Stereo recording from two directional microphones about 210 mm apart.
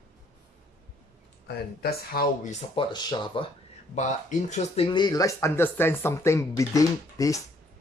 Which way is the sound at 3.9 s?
35° left (ahead or behind).